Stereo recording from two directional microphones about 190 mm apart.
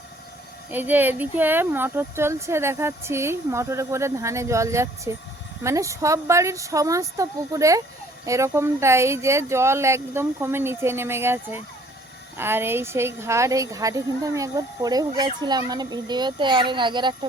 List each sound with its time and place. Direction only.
0.7 s speech: 10° right (ahead or behind)